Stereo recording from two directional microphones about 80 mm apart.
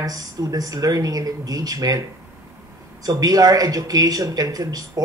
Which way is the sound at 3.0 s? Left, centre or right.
Right.